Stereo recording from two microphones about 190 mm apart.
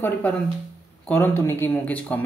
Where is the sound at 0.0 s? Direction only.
10° left (ahead or behind).